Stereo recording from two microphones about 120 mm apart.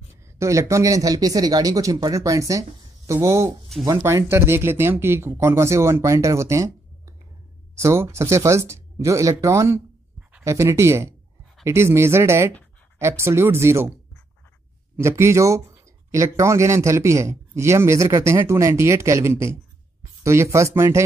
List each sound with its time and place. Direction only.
0.1 s speech: 25° right (ahead or behind)
15.0 s speech: 20° right (ahead or behind)